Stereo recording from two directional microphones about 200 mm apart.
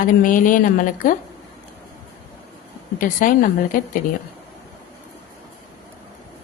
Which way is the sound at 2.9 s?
45° left (ahead or behind).